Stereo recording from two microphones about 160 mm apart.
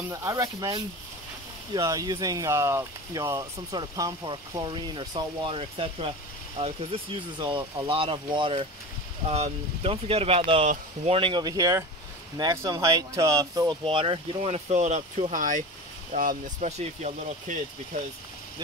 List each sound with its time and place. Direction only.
0.1 s speech: 20° right (ahead or behind)
13.8 s speech: 35° right (ahead or behind)